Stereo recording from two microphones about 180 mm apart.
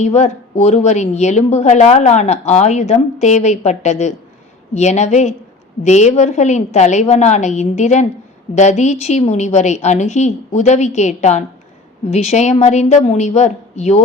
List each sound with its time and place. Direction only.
0.0 s a woman's voice: 40° left (ahead or behind)